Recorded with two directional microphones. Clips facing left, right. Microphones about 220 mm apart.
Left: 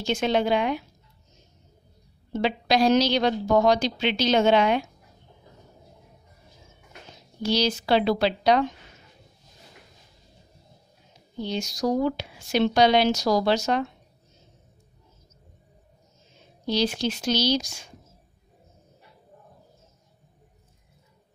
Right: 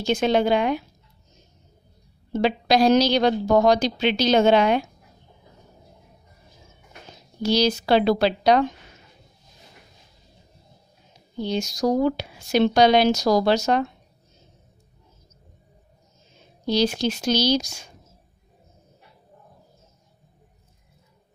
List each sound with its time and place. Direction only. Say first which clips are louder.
0.0 s a woman's voice: right 3 dB; 40° right (ahead or behind)
2.4 s a woman's voice: right 3 dB; 40° right (ahead or behind)
7.4 s speech: right 3 dB; 40° right (ahead or behind)
11.4 s speech: right 3 dB; 40° right (ahead or behind)
16.6 s a woman's voice: right 3 dB; 40° right (ahead or behind)